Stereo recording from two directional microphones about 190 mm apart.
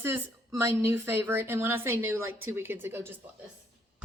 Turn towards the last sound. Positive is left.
turn(degrees=-10)  # may be behind; listen again after turning